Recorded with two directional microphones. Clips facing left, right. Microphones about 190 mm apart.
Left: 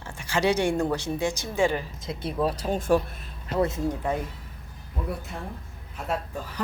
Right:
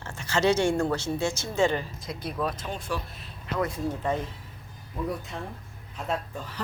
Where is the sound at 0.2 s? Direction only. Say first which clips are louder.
Even; 10° left (ahead or behind).